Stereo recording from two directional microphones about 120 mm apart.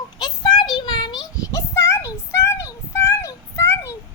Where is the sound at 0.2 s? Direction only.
40° left (ahead or behind).